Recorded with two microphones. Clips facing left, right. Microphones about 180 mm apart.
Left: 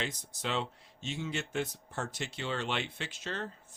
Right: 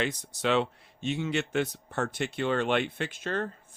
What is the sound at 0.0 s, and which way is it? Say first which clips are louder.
Speech: right 8 dB; 70° right (ahead or behind).